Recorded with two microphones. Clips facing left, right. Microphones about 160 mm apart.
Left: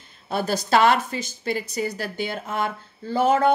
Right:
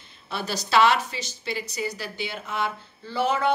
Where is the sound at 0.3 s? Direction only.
50° left (ahead or behind).